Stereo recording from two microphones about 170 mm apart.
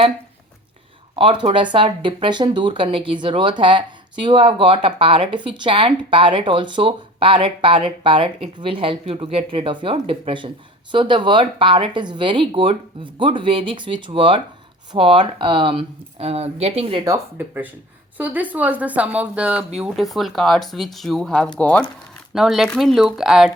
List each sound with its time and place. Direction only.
1.1 s speech: 30° right (ahead or behind)
17.0 s speech: 15° right (ahead or behind)